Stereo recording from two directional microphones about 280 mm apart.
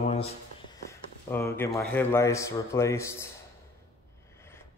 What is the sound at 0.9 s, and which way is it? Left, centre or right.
Speech, centre.